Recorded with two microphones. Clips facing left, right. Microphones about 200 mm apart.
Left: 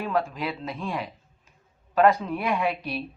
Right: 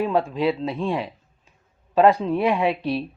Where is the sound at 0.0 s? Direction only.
25° right (ahead or behind).